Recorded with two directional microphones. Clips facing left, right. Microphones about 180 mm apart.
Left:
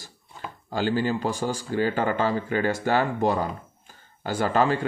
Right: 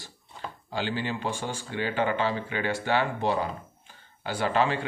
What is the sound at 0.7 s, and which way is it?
Speech, 45° left (ahead or behind).